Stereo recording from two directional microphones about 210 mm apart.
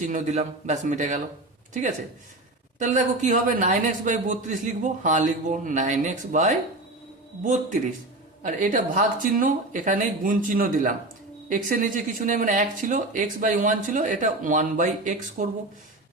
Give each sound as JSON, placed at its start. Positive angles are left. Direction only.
{"t": 0.0, "sound": "speech", "side_deg": -35}
{"t": 2.7, "sound": "speech", "side_deg": -35}